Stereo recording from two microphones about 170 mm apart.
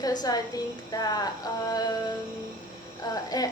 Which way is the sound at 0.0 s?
20° left (ahead or behind).